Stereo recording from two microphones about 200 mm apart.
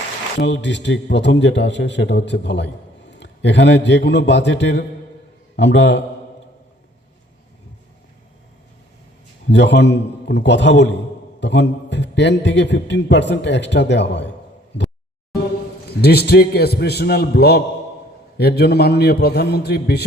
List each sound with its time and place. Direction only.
0.3 s a man's voice: 60° left (ahead or behind)
9.5 s a man's voice: 60° left (ahead or behind)
16.0 s a man's voice: 55° left (ahead or behind)